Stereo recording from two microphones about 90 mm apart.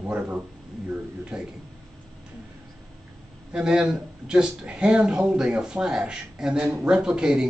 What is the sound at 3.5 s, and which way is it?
A man's voice, 10° right (ahead or behind).